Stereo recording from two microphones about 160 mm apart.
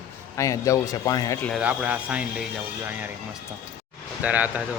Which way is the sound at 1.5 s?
10° right (ahead or behind).